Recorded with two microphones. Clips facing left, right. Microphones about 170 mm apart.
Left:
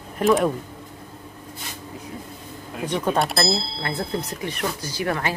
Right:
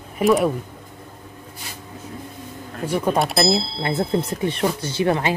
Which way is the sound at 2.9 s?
5° right (ahead or behind).